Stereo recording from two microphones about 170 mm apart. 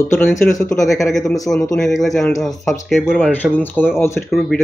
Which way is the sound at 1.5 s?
5° left (ahead or behind).